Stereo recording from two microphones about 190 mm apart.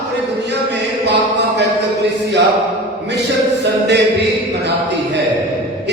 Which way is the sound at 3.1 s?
60° right (ahead or behind).